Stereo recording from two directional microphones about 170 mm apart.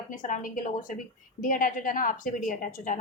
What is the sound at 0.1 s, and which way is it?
A woman's voice, 50° left (ahead or behind).